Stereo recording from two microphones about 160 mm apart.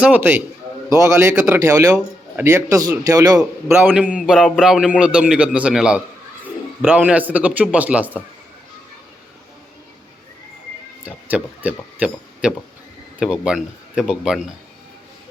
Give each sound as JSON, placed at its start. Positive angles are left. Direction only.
{"t": 0.0, "sound": "a man's voice", "side_deg": -10}
{"t": 11.0, "sound": "a man's voice", "side_deg": -10}